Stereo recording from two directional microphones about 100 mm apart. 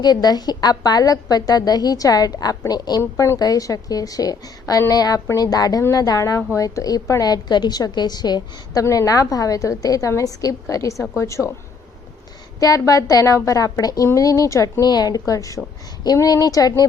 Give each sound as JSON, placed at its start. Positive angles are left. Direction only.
{"t": 0.0, "sound": "a woman's voice", "side_deg": 40}
{"t": 3.0, "sound": "a woman's voice", "side_deg": 30}
{"t": 12.5, "sound": "a woman's voice", "side_deg": 35}